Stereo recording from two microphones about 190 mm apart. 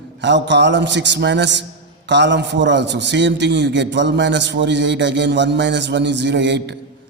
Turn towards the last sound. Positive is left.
turn(degrees=-65)  # may be behind; listen again after turning